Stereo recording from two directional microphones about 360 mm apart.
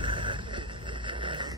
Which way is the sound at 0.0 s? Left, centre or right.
Centre.